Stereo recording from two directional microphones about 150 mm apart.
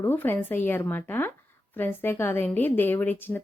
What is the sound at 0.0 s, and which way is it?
A woman's voice, 15° left (ahead or behind).